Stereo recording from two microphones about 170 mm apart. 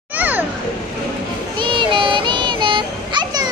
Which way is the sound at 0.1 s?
10° right (ahead or behind).